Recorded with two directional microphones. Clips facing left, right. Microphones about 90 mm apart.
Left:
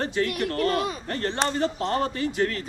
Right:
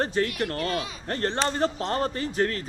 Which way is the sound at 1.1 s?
40° right (ahead or behind).